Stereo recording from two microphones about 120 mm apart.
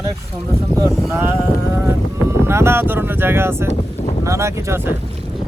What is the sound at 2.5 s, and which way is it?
Speech, 20° right (ahead or behind).